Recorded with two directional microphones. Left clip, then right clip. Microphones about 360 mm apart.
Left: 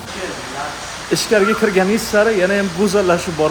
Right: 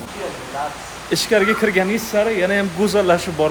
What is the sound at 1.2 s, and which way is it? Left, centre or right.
Speech, centre.